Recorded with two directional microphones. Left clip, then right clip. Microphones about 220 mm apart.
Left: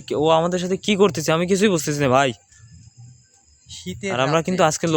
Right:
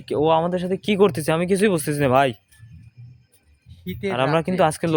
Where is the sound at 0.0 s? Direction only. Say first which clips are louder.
Left 1 dB; 15° left (ahead or behind).